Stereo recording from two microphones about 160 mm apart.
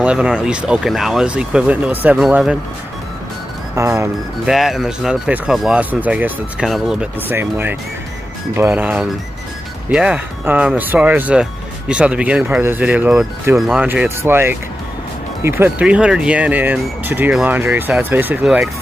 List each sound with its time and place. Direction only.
0.0 s speech: 5° right (ahead or behind)
3.7 s speech: 15° right (ahead or behind)
4.5 s speech: centre (ahead or behind)